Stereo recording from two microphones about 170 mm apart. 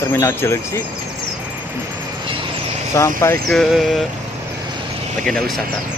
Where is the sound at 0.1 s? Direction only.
15° left (ahead or behind).